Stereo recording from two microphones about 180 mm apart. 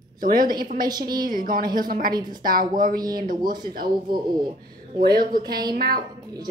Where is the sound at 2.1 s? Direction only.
25° right (ahead or behind).